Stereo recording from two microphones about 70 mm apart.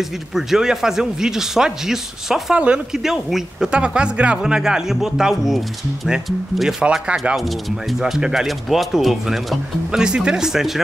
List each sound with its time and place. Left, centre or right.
0.3 s speech: centre
2.6 s speech: centre
3.0 s speech: centre
3.7 s speech: centre